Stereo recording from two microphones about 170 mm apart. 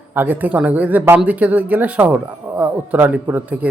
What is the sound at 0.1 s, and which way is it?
Speech, 10° right (ahead or behind).